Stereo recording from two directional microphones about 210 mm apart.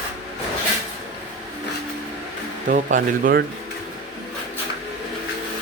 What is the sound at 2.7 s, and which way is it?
Speech, 40° right (ahead or behind).